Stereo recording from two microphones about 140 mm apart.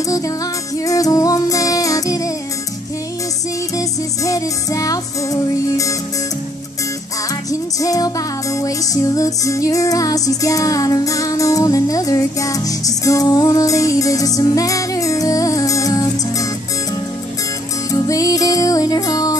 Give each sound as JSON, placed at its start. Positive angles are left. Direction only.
{"t": 0.0, "sound": "music", "side_deg": 25}
{"t": 3.7, "sound": "music", "side_deg": 25}
{"t": 7.8, "sound": "music", "side_deg": 25}
{"t": 17.9, "sound": "music", "side_deg": 25}